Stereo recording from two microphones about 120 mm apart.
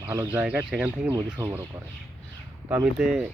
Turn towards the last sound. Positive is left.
turn(degrees=-5)  # may be behind; listen again after turning